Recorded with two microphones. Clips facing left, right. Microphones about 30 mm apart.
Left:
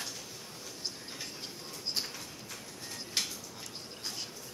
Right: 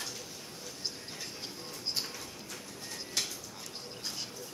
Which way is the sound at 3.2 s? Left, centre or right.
Centre.